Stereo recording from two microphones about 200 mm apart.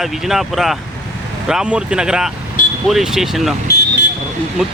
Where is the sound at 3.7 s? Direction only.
55° left (ahead or behind).